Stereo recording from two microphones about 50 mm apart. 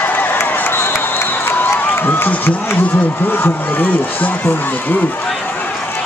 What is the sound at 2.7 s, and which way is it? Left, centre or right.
Speech, left.